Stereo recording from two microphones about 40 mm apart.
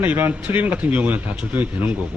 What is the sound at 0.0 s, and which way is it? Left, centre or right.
Speech, right.